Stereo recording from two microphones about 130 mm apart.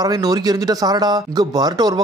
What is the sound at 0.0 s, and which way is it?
A man's voice, 30° right (ahead or behind).